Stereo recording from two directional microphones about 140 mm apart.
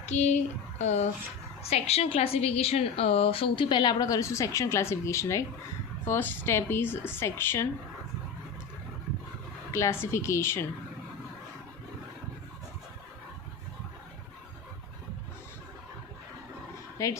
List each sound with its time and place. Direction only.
0.0 s a woman's voice: 55° left (ahead or behind); by 7.7 s 15° left (ahead or behind)
9.7 s a woman's voice: 20° left (ahead or behind)
17.0 s a woman's voice: 20° left (ahead or behind)